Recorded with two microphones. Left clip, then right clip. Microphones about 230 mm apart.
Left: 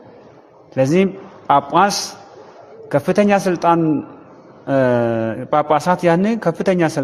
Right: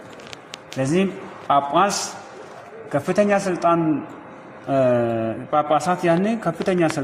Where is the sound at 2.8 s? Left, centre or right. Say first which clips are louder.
Left 4 dB; left.